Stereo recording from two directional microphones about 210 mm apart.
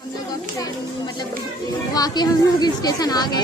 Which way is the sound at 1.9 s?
20° left (ahead or behind).